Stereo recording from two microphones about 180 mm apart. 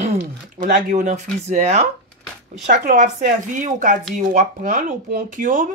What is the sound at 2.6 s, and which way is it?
Speech, 50° right (ahead or behind).